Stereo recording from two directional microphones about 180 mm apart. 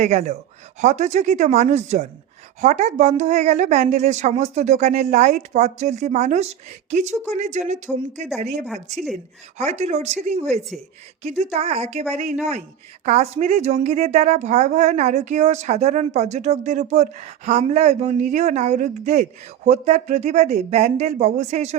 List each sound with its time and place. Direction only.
0.0 s speech: 40° right (ahead or behind)
8.6 s a woman's voice: centre (ahead or behind)
9.6 s speech: 40° right (ahead or behind)